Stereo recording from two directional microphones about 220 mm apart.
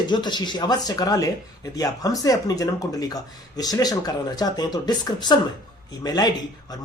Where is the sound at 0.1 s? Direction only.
20° left (ahead or behind).